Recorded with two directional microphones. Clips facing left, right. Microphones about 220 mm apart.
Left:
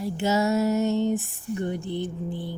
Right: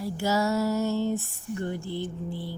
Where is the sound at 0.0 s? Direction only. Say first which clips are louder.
Left 2 dB; 20° left (ahead or behind).